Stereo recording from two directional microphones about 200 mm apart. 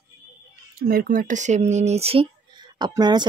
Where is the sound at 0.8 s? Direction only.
45° right (ahead or behind).